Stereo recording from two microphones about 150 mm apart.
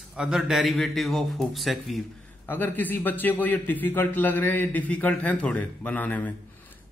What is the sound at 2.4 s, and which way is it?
A man's voice, 10° left (ahead or behind).